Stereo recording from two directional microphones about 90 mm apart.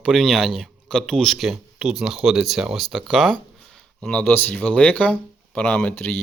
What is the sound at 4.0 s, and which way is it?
Speech, 10° left (ahead or behind).